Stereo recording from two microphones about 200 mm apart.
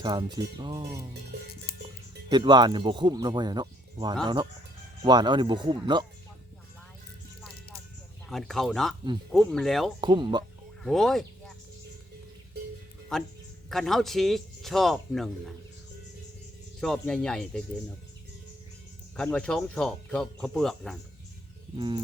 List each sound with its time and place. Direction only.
0.0 s speech: 20° right (ahead or behind)
2.3 s speech: 20° right (ahead or behind)
8.3 s speech: centre (ahead or behind)
10.0 s speech: 25° right (ahead or behind)
10.8 s speech: centre (ahead or behind)
13.1 s speech: 5° left (ahead or behind)
16.8 s speech: 5° left (ahead or behind)
19.1 s speech: 5° left (ahead or behind)
21.8 s speech: 20° right (ahead or behind)